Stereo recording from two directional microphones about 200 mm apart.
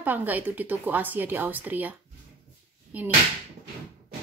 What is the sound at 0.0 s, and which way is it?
A woman's voice, 10° right (ahead or behind).